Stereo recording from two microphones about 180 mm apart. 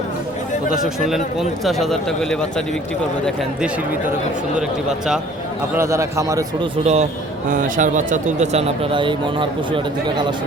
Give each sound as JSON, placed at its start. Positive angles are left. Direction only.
{"t": 0.7, "sound": "speech", "side_deg": 0}
{"t": 4.5, "sound": "speech", "side_deg": -5}
{"t": 5.7, "sound": "speech", "side_deg": -15}
{"t": 6.8, "sound": "speech", "side_deg": -40}